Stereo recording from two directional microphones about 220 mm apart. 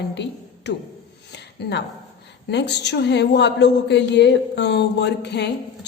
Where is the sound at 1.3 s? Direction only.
50° left (ahead or behind).